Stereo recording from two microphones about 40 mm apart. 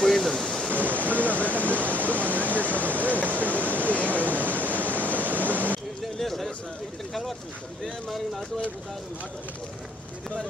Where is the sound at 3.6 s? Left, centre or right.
Right.